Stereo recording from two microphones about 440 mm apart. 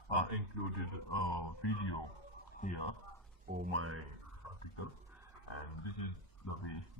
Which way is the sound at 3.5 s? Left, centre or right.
Right.